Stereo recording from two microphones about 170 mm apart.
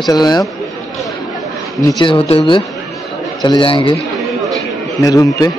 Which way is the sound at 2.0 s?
30° left (ahead or behind).